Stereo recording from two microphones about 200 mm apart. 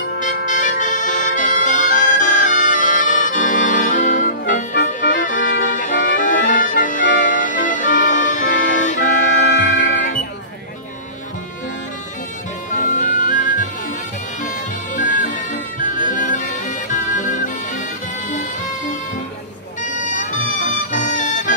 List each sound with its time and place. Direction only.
0.2 s music: 40° left (ahead or behind)
9.3 s music: 65° left (ahead or behind)
12.7 s music: 40° left (ahead or behind)
15.0 s music: 40° left (ahead or behind)
19.8 s music: 40° left (ahead or behind)